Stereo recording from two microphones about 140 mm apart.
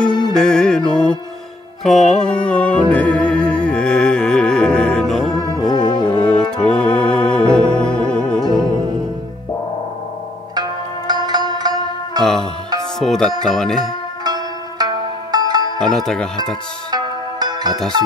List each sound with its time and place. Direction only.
0.4 s music: 5° left (ahead or behind)
5.5 s music: 30° left (ahead or behind)
6.6 s organ: 5° left (ahead or behind)
10.5 s zither: 30° right (ahead or behind)
12.2 s music: 5° left (ahead or behind)
13.4 s speech: 5° left (ahead or behind)
14.2 s zither: 30° right (ahead or behind)
15.8 s speech: 5° left (ahead or behind)
16.9 s music: 30° right (ahead or behind)